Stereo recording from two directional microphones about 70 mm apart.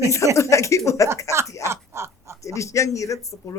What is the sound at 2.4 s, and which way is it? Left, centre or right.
A woman's voice, left.